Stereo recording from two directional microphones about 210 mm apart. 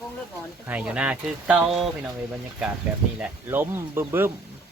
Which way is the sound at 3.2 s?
10° right (ahead or behind).